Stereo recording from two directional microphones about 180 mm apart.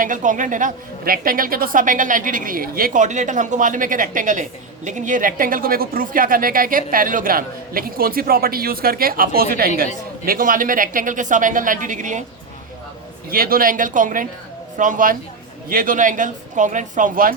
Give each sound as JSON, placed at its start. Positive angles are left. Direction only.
{"t": 0.0, "sound": "a woman's voice", "side_deg": -45}
{"t": 13.3, "sound": "a woman's voice", "side_deg": -55}